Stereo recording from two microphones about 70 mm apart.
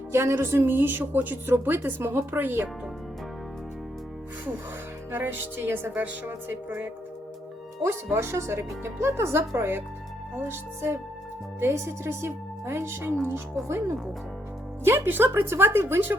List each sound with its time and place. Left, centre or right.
0.1 s a woman's voice: right
5.1 s a woman's voice: right
8.1 s a woman's voice: right
11.6 s a woman's voice: right